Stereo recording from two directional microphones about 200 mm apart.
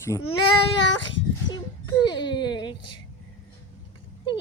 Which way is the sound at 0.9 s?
65° left (ahead or behind).